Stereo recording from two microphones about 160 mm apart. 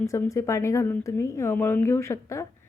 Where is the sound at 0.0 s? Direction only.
20° left (ahead or behind).